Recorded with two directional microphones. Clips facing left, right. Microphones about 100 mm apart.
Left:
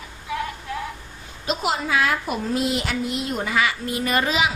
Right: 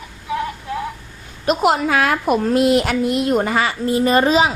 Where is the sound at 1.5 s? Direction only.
55° right (ahead or behind).